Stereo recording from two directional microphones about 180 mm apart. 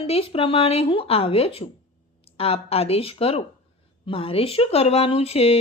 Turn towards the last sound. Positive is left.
turn(degrees=35)  # may be behind; listen again after turning